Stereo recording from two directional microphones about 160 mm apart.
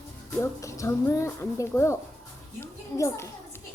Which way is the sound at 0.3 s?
20° left (ahead or behind).